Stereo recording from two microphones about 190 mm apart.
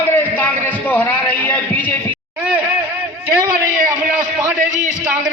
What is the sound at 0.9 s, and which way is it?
A man's voice, 10° left (ahead or behind).